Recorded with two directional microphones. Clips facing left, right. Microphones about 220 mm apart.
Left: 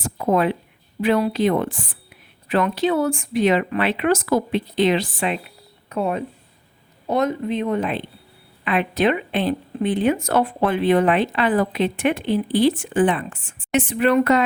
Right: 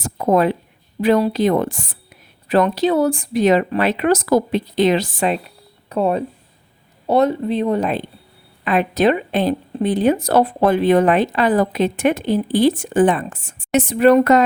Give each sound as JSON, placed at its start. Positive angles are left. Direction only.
{"t": 0.0, "sound": "speech", "side_deg": -40}